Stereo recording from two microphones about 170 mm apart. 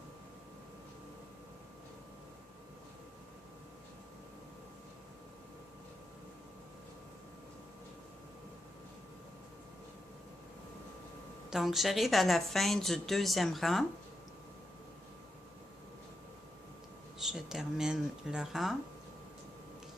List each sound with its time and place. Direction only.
11.5 s a woman's voice: centre (ahead or behind)
17.2 s a woman's voice: centre (ahead or behind)